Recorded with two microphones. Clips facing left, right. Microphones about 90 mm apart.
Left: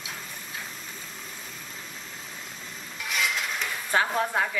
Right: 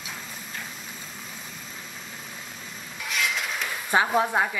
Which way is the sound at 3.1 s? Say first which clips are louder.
Even; centre (ahead or behind).